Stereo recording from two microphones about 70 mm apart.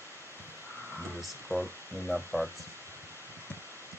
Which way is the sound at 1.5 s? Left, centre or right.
Right.